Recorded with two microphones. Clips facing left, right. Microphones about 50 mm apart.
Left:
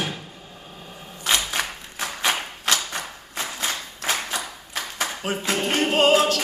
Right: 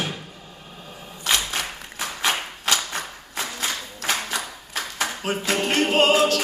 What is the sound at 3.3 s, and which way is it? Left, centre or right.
Clapping, left.